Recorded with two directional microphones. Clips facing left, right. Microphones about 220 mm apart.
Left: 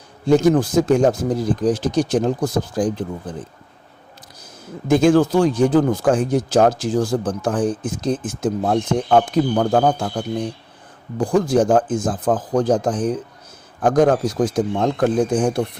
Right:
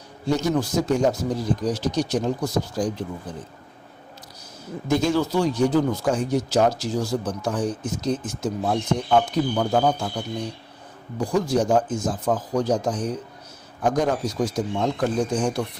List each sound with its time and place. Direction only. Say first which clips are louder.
0.3 s speech: left 8 dB; 50° left (ahead or behind)
4.9 s speech: left 8 dB; 50° left (ahead or behind)